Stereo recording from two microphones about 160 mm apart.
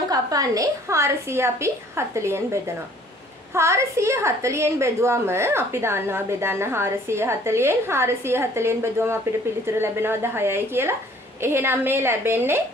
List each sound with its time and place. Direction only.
0.1 s a woman's voice: 20° right (ahead or behind)